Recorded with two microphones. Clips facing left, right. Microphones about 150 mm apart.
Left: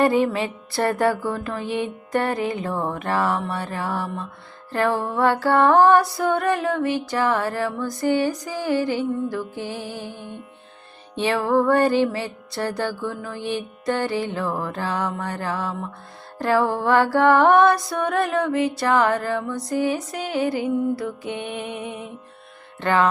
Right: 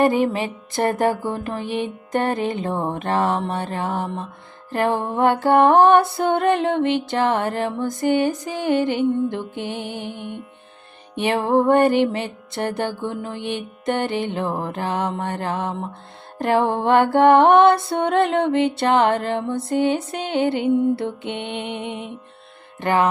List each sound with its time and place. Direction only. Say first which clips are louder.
0.0 s music: right 1 dB; 20° right (ahead or behind)